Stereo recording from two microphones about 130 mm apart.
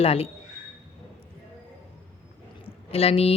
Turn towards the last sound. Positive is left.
turn(degrees=50)  # may be behind; listen again after turning